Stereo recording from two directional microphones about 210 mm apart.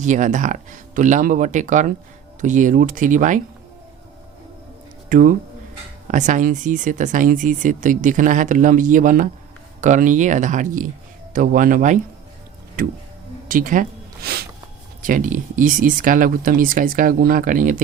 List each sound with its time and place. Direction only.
0.0 s speech: 35° right (ahead or behind)
5.0 s speech: 40° right (ahead or behind)
13.5 s a sound: 40° right (ahead or behind)
15.0 s speech: 40° right (ahead or behind)